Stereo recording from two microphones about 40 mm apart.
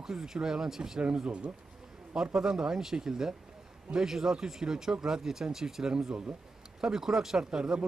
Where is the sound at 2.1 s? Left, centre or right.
Centre.